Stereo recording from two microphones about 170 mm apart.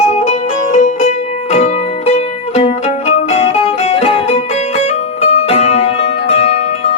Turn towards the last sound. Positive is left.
turn(degrees=35)  # may be behind; listen again after turning